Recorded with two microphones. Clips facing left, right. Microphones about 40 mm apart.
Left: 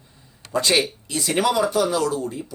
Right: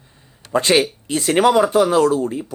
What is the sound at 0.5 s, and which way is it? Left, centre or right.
A man's voice, right.